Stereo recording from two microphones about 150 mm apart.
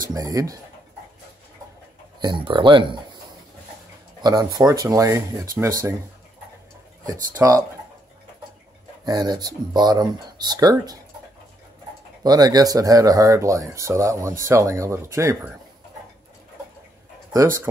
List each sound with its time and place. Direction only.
0.1 s speech: 25° right (ahead or behind)
2.1 s speech: 30° right (ahead or behind)
4.2 s speech: 25° right (ahead or behind)
7.1 s speech: 20° right (ahead or behind)
9.0 s speech: 25° right (ahead or behind)
12.2 s speech: 25° right (ahead or behind)